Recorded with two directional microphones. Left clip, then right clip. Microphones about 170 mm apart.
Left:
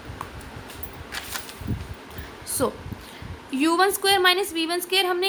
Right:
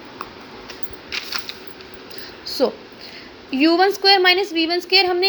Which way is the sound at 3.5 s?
10° right (ahead or behind).